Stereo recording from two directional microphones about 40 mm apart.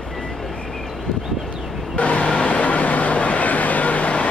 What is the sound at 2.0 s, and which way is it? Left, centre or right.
Vehicle, left.